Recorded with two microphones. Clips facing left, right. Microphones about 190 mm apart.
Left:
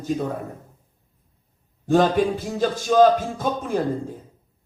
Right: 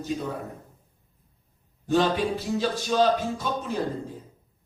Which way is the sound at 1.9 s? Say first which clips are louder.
Left 5 dB; 50° left (ahead or behind).